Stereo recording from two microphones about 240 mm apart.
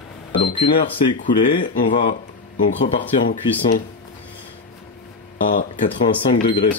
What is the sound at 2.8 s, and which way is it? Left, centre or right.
Speech, left.